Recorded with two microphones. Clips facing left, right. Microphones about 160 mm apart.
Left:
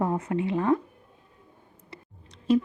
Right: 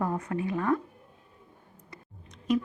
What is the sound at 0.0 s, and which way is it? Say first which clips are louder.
Speech: left 3 dB; 25° left (ahead or behind).